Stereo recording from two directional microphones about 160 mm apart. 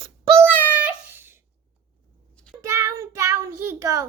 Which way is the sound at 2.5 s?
20° right (ahead or behind).